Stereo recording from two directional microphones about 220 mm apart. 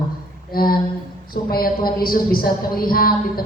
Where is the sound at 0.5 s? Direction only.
40° left (ahead or behind).